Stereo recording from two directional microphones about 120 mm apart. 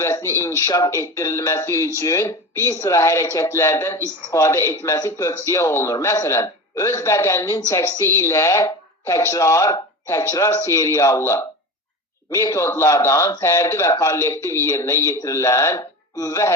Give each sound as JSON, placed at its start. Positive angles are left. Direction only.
{"t": 0.0, "sound": "a man's voice", "side_deg": 25}